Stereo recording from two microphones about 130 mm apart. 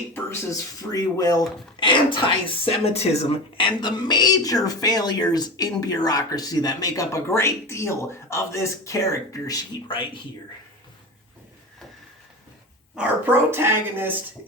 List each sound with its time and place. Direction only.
0.1 s speech: 20° left (ahead or behind); by 3.7 s 50° left (ahead or behind)
3.8 s speech: 35° left (ahead or behind)
13.0 s speech: 15° right (ahead or behind)